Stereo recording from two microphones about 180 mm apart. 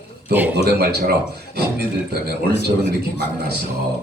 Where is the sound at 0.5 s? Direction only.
60° right (ahead or behind).